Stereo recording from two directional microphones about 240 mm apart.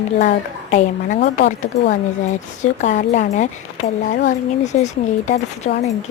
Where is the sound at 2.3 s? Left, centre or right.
Left.